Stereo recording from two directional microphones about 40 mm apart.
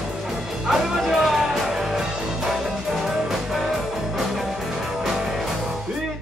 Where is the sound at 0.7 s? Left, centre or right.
Centre.